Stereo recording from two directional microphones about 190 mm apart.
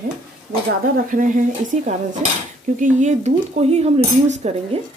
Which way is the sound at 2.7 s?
40° right (ahead or behind).